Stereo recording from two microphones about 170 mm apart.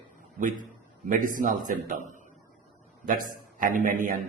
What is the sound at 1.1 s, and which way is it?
A man's voice, 50° right (ahead or behind).